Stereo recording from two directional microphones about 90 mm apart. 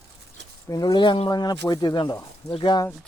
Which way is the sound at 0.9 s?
75° left (ahead or behind).